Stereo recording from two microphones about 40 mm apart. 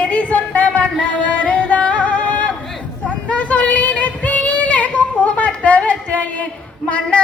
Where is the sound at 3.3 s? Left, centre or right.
Left.